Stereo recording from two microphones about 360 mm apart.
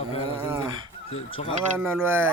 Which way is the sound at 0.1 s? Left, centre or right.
Centre.